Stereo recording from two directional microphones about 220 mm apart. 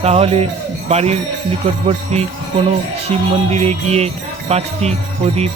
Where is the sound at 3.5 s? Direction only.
30° right (ahead or behind).